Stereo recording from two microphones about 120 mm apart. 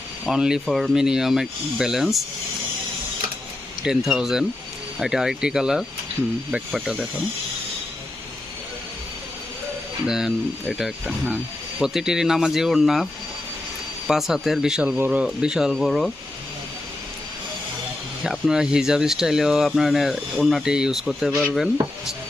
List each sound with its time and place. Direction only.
0.3 s speech: 5° right (ahead or behind)
3.8 s speech: 5° right (ahead or behind)
10.1 s speech: 5° right (ahead or behind)
14.1 s speech: centre (ahead or behind)
18.2 s speech: 5° right (ahead or behind)
21.5 s chopping: centre (ahead or behind)